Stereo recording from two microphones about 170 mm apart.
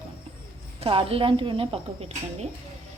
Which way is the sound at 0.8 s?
35° right (ahead or behind).